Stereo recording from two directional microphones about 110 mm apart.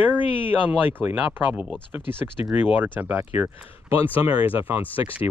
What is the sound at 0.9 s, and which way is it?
Speech, 15° right (ahead or behind).